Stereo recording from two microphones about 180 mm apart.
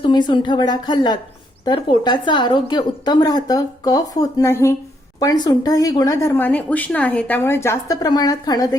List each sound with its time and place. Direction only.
0.0 s a woman's voice: 25° left (ahead or behind)